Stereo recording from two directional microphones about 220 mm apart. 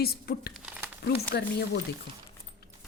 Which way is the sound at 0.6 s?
5° right (ahead or behind).